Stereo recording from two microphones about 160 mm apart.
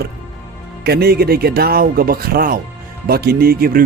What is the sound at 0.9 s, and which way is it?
Speech, 80° right.